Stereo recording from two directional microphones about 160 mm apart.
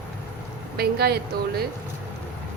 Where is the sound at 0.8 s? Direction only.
85° right.